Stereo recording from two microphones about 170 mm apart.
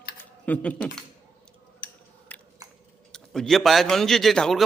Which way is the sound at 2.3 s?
10° left (ahead or behind).